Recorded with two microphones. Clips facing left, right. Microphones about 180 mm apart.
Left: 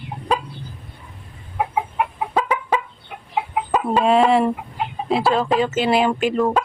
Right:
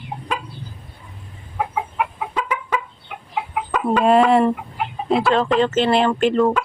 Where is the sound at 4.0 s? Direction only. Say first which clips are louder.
Right 2 dB; centre (ahead or behind).